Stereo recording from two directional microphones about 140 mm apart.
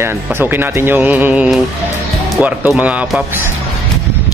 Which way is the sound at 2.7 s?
10° right (ahead or behind).